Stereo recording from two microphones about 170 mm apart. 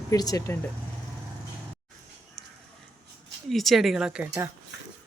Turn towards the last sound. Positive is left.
turn(degrees=-5)  # may be behind; listen again after turning